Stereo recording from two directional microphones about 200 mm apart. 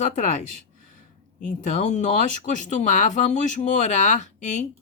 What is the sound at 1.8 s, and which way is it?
Speech, 35° left (ahead or behind).